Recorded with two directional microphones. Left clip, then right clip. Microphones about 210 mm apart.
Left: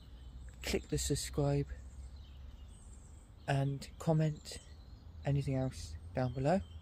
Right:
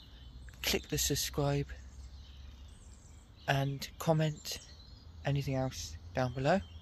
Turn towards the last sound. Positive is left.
turn(degrees=0)  # may be behind; listen again after turning